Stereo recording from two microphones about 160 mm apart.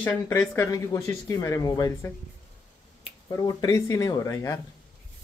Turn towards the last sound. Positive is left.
turn(degrees=20)  # may be behind; listen again after turning